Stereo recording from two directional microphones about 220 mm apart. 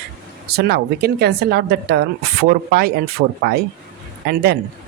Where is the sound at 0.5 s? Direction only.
45° right (ahead or behind).